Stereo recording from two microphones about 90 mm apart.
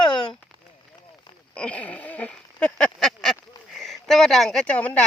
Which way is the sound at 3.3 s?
Centre (ahead or behind).